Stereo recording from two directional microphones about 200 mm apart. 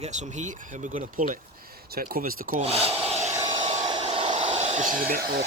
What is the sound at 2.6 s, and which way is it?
Speech, 30° right (ahead or behind).